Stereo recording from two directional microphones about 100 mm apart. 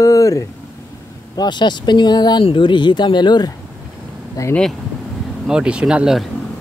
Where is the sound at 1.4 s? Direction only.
50° left (ahead or behind).